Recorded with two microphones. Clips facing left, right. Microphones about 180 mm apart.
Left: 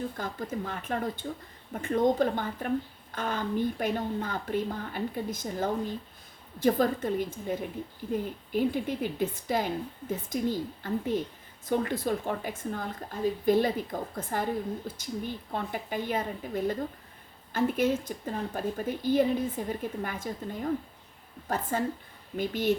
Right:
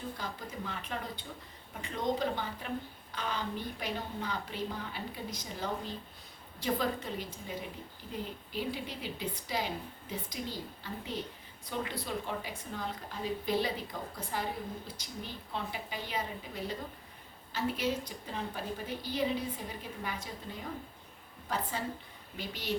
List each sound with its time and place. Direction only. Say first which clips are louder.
0.2 s a woman's voice: left 7 dB; 50° left (ahead or behind)